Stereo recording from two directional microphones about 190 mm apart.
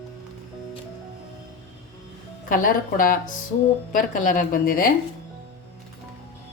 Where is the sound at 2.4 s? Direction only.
45° left (ahead or behind).